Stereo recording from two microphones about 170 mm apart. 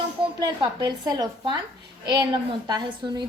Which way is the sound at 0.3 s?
25° right (ahead or behind).